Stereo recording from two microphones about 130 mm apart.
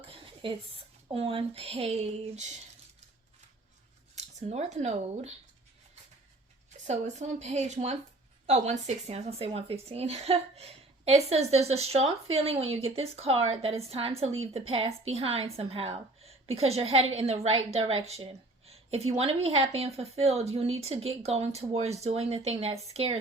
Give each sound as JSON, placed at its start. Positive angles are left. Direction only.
{"t": 0.0, "sound": "a sound", "side_deg": -45}
{"t": 1.1, "sound": "a woman's voice", "side_deg": -45}
{"t": 4.1, "sound": "speech", "side_deg": -60}
{"t": 6.8, "sound": "a woman's voice", "side_deg": -60}